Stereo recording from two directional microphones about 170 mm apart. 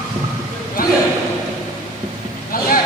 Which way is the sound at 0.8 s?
55° left (ahead or behind).